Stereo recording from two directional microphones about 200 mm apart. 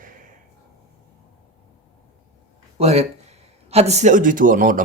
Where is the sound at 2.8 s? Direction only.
30° right (ahead or behind).